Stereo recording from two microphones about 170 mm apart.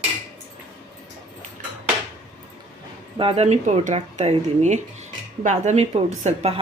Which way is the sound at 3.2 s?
35° right (ahead or behind).